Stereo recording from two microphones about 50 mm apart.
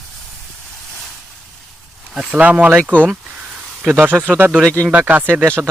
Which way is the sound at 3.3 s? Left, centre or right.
Centre.